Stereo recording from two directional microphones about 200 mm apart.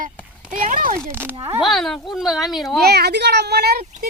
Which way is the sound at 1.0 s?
5° left (ahead or behind).